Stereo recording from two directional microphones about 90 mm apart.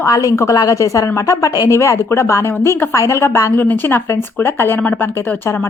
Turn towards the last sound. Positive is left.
turn(degrees=25)  # may be behind; listen again after turning